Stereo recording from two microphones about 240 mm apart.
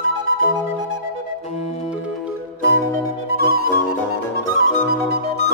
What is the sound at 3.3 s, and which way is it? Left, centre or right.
Music, right.